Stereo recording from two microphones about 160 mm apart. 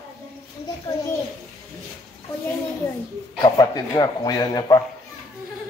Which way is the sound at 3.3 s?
25° left (ahead or behind).